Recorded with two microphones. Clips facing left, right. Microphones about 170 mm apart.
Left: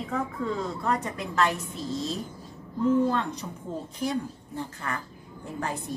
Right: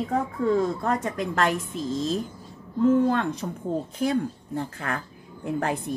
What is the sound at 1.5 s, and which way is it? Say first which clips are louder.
Speech: right 5 dB; 90° right.